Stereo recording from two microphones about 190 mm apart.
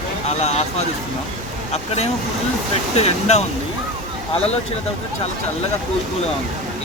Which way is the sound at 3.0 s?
35° left (ahead or behind).